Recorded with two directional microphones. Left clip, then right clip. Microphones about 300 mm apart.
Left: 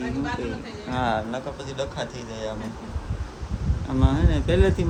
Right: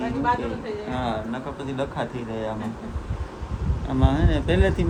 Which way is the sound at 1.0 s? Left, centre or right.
Centre.